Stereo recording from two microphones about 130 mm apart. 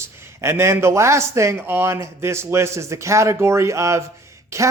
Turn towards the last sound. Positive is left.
turn(degrees=-25)  # may be behind; listen again after turning